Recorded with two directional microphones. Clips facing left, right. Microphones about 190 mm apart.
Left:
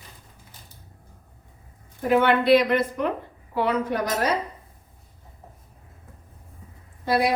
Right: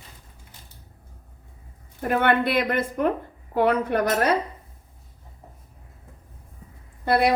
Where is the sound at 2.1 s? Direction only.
50° right (ahead or behind).